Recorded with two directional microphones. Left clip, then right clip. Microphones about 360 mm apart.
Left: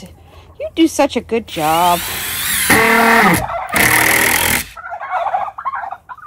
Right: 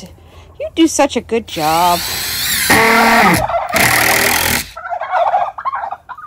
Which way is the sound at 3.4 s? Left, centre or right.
Right.